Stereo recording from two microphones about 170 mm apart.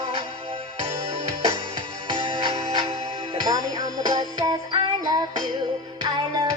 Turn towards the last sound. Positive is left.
turn(degrees=-25)  # may be behind; listen again after turning